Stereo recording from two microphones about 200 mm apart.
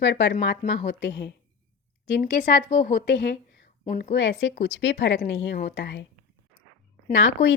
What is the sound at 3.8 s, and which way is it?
Speech, 50° left (ahead or behind).